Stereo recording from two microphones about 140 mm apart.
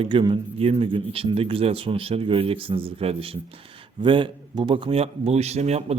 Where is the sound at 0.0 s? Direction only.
35° right (ahead or behind).